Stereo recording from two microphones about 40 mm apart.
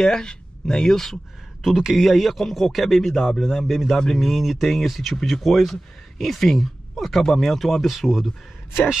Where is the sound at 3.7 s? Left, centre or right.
Centre.